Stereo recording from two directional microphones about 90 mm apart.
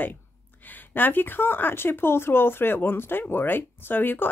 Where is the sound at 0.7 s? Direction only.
20° left (ahead or behind).